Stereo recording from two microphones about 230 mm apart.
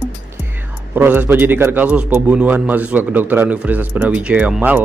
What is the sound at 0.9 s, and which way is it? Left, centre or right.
A man's voice, centre.